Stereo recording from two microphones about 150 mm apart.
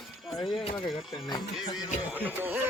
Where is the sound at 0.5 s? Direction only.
35° left (ahead or behind).